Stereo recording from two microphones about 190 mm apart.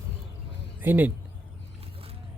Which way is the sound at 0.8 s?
10° right (ahead or behind).